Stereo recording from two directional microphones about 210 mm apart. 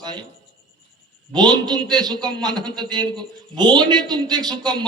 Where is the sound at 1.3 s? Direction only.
20° right (ahead or behind).